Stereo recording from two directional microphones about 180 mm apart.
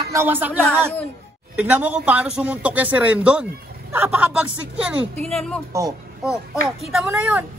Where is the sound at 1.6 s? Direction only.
10° right (ahead or behind).